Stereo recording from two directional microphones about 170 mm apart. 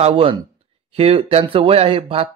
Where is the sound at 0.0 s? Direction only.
35° right (ahead or behind).